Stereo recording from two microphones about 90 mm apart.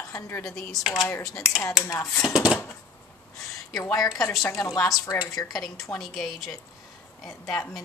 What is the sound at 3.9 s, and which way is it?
Speech, 40° left (ahead or behind).